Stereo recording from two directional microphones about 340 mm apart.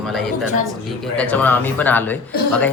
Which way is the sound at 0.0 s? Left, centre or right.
Centre.